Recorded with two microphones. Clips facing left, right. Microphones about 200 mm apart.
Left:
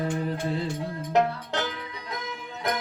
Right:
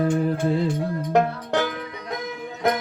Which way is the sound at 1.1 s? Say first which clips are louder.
Right 3 dB; 55° right (ahead or behind).